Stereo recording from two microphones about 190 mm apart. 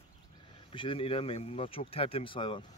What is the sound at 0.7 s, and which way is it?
A man's voice, 25° left (ahead or behind).